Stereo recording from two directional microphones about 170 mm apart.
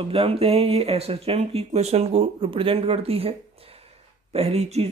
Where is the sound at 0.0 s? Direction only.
35° right (ahead or behind).